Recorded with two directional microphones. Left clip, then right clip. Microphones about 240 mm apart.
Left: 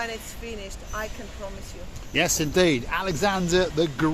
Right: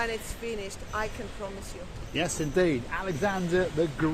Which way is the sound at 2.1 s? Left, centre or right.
Left.